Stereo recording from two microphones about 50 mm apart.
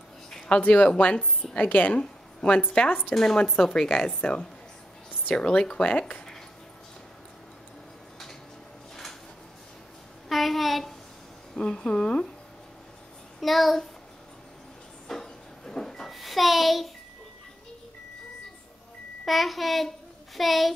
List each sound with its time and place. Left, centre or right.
0.5 s a woman's voice: left
1.6 s a woman's voice: left
10.2 s a sound: centre
11.5 s speech: centre
13.4 s a child's voice: centre
15.0 s a sound: centre
19.2 s a child's voice: centre